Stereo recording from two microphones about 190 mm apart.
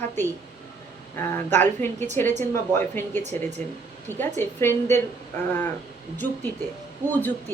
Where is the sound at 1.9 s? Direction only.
35° right (ahead or behind).